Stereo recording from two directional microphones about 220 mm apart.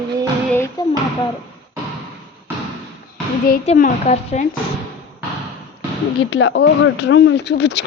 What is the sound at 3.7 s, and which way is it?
Speech, 30° left (ahead or behind).